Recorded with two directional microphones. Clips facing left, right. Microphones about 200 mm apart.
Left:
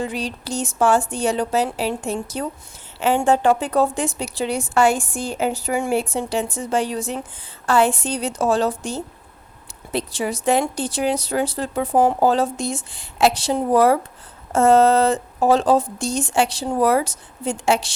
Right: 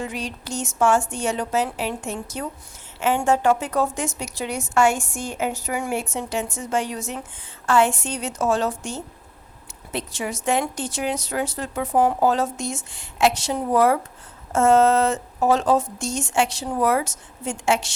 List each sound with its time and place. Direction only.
0.0 s a woman's voice: 35° left (ahead or behind)